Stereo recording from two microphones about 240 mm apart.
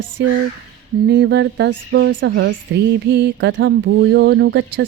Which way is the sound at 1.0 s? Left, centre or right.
Right.